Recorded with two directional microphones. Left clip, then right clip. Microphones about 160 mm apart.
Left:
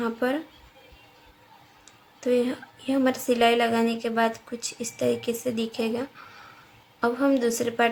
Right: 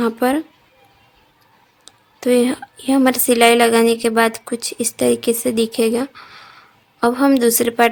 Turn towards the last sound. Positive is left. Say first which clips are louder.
# right 9 dB
turn(degrees=-90)